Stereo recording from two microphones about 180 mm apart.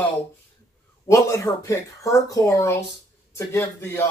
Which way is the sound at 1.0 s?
15° left (ahead or behind).